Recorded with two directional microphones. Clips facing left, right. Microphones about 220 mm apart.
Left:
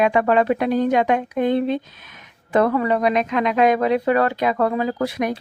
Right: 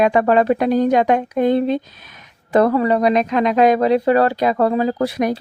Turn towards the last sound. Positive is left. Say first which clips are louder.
# right 4 dB
turn(degrees=-35)  # may be behind; listen again after turning